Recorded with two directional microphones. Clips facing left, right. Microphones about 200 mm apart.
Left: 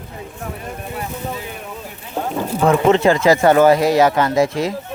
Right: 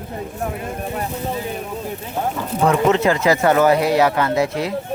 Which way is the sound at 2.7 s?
25° left (ahead or behind).